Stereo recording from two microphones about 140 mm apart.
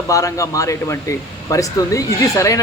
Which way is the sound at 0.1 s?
25° left (ahead or behind).